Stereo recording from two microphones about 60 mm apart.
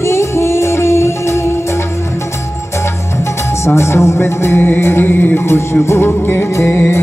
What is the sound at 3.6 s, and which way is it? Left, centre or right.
Music, left.